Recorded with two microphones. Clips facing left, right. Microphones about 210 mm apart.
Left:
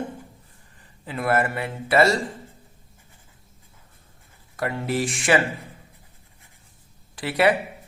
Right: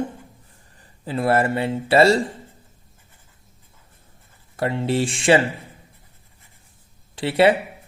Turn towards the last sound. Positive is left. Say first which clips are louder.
# right 4 dB
turn(degrees=-25)  # may be behind; listen again after turning